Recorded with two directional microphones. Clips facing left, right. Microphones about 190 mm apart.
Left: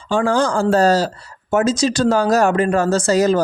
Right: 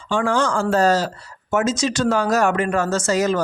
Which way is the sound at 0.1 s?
35° left (ahead or behind).